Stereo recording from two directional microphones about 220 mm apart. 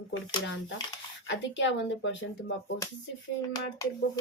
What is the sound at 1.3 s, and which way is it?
Speech, 55° left (ahead or behind).